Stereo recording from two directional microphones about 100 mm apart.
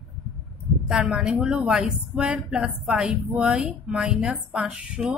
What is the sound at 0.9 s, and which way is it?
Speech, 5° right (ahead or behind).